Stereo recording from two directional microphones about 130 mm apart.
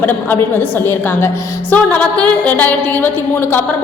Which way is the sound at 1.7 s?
10° left (ahead or behind).